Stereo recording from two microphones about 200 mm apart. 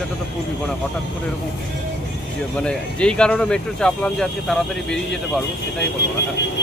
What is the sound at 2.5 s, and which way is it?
Speech, 5° left (ahead or behind).